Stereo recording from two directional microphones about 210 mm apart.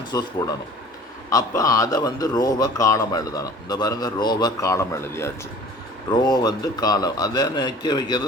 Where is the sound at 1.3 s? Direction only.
15° left (ahead or behind).